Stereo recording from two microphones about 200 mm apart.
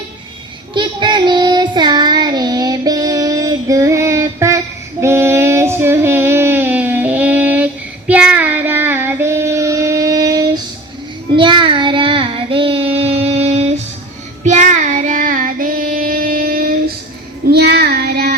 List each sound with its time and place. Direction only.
0.7 s child singing: 25° right (ahead or behind); by 18.3 s 55° right (ahead or behind)